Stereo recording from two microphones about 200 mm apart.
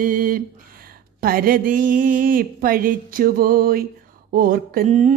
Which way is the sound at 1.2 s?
45° right (ahead or behind).